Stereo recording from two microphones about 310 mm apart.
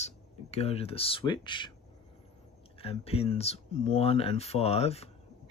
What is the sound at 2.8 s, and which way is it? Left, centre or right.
Speech, centre.